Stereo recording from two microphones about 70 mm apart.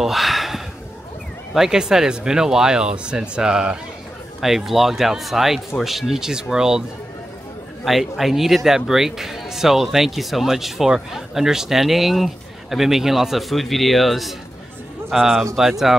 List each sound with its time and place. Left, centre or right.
0.0 s a sound: centre
1.5 s a man's voice: centre
7.8 s a man's voice: centre